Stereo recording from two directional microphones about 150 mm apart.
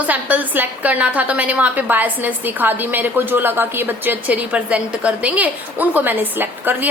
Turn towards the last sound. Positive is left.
turn(degrees=-10)  # may be behind; listen again after turning